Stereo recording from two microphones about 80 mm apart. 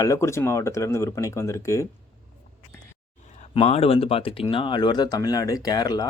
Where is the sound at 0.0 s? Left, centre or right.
Left.